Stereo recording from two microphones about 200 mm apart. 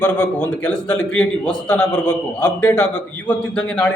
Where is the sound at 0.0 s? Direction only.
10° left (ahead or behind).